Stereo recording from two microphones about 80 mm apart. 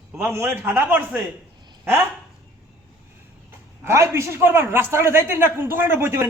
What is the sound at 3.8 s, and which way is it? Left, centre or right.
A man's voice, right.